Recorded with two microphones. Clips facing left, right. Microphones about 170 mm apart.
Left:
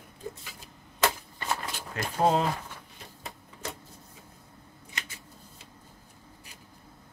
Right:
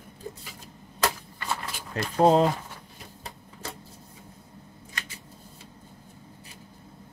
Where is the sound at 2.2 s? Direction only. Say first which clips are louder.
Right 5 dB; 35° right (ahead or behind).